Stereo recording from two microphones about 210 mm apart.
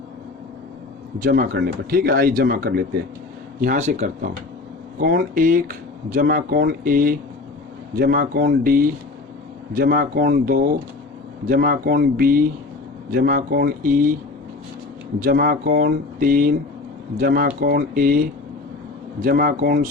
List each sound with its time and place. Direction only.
1.2 s speech: 45° right (ahead or behind)
15.2 s speech: 45° right (ahead or behind)
19.2 s speech: 45° right (ahead or behind)